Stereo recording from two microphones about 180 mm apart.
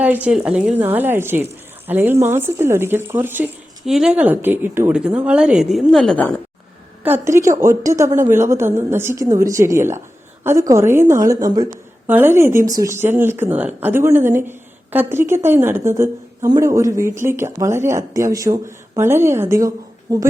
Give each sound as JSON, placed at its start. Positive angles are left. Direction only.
{"t": 0.0, "sound": "a woman's voice", "side_deg": -10}
{"t": 7.0, "sound": "a woman's voice", "side_deg": -15}